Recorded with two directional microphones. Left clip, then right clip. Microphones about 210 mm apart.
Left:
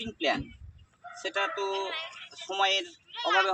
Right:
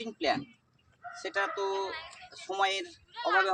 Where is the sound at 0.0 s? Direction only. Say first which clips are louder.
Left 1 dB; 5° right (ahead or behind).